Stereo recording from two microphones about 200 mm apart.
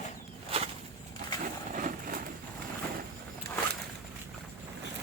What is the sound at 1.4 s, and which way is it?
Vehicle, 45° right (ahead or behind).